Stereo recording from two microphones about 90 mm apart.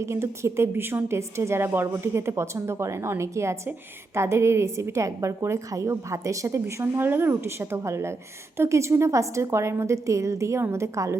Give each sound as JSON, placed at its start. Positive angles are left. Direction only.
{"t": 0.0, "sound": "a woman's voice", "side_deg": -30}